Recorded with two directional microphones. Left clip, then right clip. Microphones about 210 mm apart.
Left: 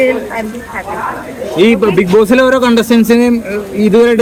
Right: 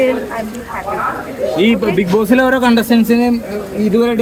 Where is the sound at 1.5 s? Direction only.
25° left (ahead or behind).